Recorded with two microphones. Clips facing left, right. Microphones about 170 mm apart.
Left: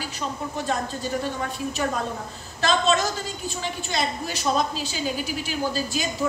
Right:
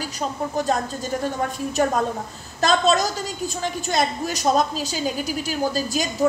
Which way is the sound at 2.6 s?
40° right (ahead or behind).